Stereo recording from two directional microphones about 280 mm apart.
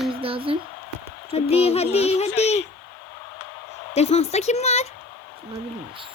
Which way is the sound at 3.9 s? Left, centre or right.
Left.